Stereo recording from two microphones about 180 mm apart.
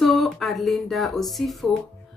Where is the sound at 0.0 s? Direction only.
Centre (ahead or behind).